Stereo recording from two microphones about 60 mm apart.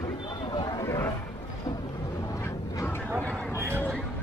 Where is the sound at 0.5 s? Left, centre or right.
Left.